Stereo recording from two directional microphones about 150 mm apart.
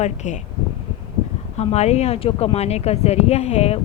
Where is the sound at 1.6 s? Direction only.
45° left (ahead or behind).